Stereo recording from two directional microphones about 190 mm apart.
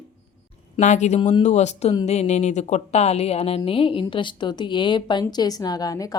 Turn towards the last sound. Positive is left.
turn(degrees=20)  # may be behind; listen again after turning